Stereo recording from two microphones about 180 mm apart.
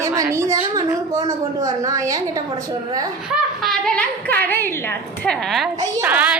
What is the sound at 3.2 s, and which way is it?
A woman's voice, centre (ahead or behind).